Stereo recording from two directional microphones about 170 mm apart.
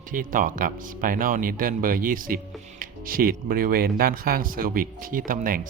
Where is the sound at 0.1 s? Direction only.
55° right (ahead or behind).